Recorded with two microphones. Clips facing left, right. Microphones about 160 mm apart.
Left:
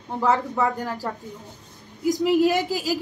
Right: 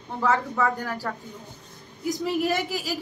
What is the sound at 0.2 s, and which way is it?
Speech, 20° left (ahead or behind).